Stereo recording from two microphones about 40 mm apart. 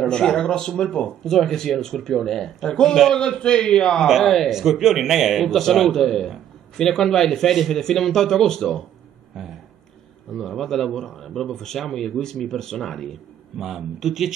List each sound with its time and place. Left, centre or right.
0.1 s a man's voice: centre
4.2 s a man's voice: centre
4.5 s a man's voice: centre
5.5 s speech: centre
9.3 s a sound: centre
10.3 s speech: centre
13.6 s a man's voice: centre